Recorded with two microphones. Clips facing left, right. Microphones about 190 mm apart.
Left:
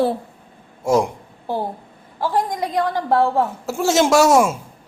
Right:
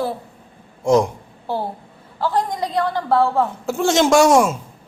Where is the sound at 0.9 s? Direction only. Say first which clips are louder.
Right 2 dB; 5° left (ahead or behind).